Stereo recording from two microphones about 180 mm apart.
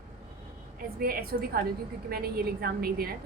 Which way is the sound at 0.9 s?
55° right (ahead or behind).